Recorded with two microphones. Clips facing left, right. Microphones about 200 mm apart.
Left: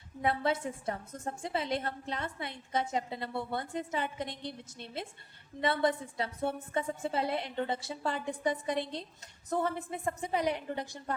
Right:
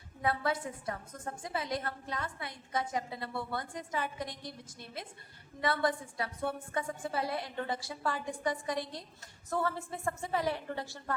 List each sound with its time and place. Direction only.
0.2 s a woman's voice: 25° left (ahead or behind)